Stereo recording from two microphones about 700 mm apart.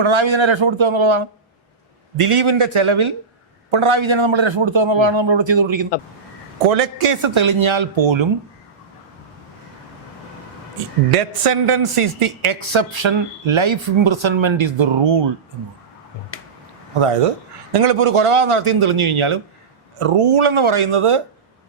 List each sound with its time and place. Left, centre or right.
0.0 s a man's voice: right
6.7 s a man's voice: right
11.1 s a man's voice: right
17.7 s speech: right